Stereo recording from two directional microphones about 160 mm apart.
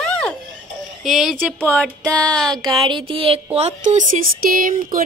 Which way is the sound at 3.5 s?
45° right (ahead or behind).